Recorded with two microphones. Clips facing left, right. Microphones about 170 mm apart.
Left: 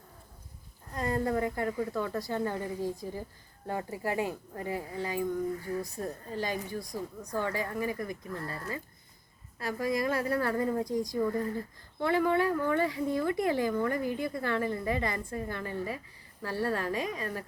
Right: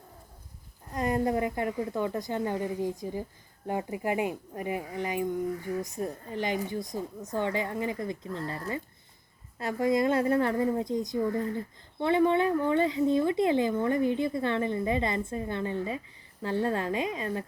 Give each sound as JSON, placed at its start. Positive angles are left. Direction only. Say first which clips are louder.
{"t": 0.9, "sound": "a woman's voice", "louder": "right 3 dB", "side_deg": -20}